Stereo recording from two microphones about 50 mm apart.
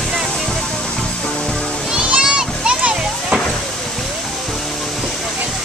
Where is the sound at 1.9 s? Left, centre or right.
Centre.